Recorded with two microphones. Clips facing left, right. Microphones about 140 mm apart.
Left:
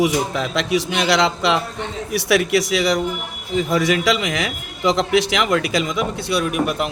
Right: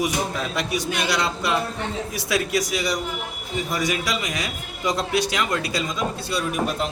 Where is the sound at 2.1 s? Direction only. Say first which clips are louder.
Left 8 dB; 80° left.